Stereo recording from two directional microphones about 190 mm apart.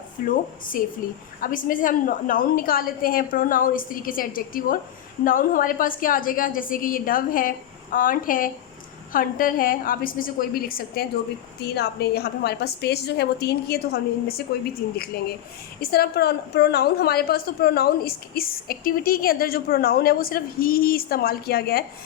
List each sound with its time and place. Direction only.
0.3 s a woman's voice: 45° left (ahead or behind)